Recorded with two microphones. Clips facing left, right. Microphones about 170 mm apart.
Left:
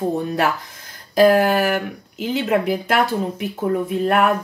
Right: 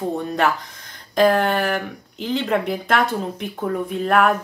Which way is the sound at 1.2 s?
5° left (ahead or behind).